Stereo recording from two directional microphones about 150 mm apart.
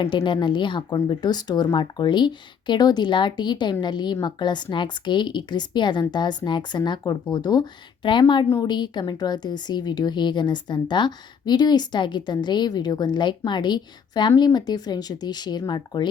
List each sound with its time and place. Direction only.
0.0 s speech: 30° left (ahead or behind)